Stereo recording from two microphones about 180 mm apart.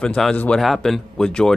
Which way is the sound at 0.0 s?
5° left (ahead or behind).